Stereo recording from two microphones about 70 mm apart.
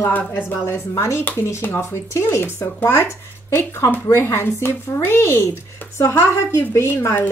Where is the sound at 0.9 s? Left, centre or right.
Left.